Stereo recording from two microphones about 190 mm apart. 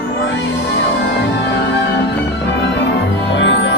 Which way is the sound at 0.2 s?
70° left (ahead or behind).